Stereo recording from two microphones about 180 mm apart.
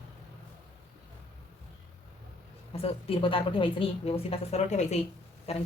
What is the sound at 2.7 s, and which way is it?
A woman's voice, 30° left (ahead or behind).